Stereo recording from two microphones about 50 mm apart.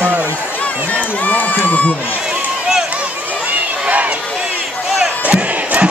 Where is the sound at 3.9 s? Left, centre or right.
Right.